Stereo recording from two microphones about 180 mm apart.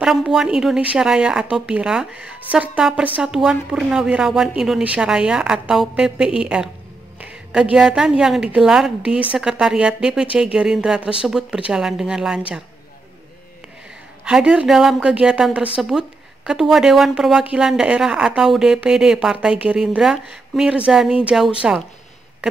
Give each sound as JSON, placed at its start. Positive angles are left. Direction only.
{"t": 0.0, "sound": "a woman's voice", "side_deg": -5}
{"t": 7.2, "sound": "a sound", "side_deg": -10}
{"t": 7.7, "sound": "a woman's voice", "side_deg": -5}
{"t": 14.2, "sound": "a woman's voice", "side_deg": -5}